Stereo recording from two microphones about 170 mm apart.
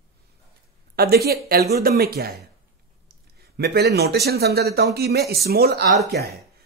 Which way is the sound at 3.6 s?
70° right (ahead or behind).